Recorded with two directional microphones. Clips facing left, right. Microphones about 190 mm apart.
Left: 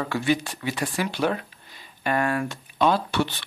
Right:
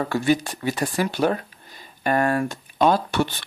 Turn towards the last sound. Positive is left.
turn(degrees=-45)  # may be behind; listen again after turning